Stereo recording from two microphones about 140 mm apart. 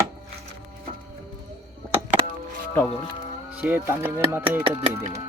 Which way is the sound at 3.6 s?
15° right (ahead or behind).